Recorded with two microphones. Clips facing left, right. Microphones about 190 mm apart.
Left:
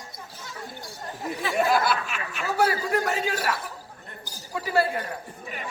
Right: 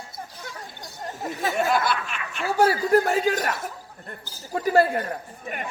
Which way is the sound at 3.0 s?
40° right (ahead or behind).